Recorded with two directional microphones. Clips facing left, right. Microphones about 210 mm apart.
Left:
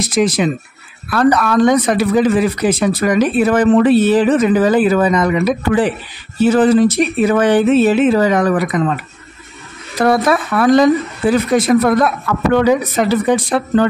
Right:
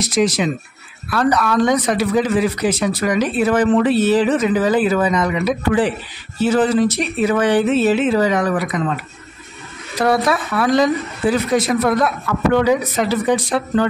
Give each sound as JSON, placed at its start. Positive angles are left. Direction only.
{"t": 0.0, "sound": "speech", "side_deg": 55}
{"t": 10.0, "sound": "speech", "side_deg": 55}